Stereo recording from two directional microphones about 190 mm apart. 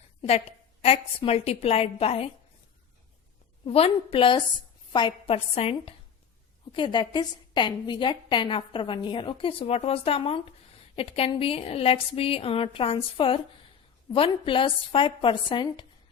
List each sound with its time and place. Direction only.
0.2 s a woman's voice: 30° left (ahead or behind)
3.7 s a woman's voice: 30° left (ahead or behind)